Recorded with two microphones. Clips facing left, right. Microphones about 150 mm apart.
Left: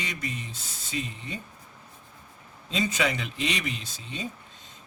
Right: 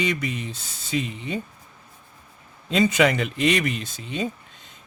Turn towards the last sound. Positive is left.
turn(degrees=-65)  # may be behind; listen again after turning